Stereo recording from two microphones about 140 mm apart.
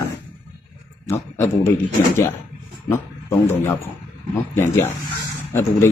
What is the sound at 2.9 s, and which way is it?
A man's voice, 15° left (ahead or behind).